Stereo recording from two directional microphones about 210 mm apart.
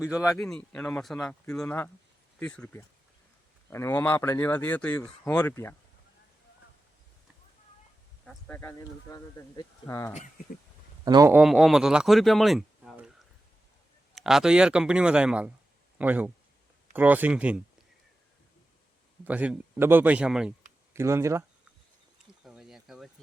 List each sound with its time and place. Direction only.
0.3 s speech: 5° left (ahead or behind)
8.2 s speech: 5° left (ahead or behind)
10.2 s speech: 40° left (ahead or behind)
11.0 s a man's voice: 15° right (ahead or behind)
19.2 s speech: 5° right (ahead or behind)
22.4 s a sound: centre (ahead or behind)